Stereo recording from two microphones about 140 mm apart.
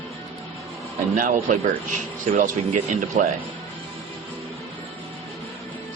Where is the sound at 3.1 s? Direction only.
55° right (ahead or behind).